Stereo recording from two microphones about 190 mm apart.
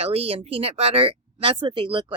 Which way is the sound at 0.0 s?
30° right (ahead or behind).